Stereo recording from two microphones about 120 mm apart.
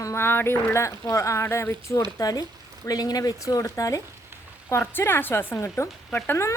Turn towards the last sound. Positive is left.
turn(degrees=20)  # may be behind; listen again after turning